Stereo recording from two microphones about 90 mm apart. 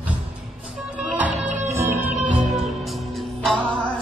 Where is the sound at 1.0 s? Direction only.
15° right (ahead or behind).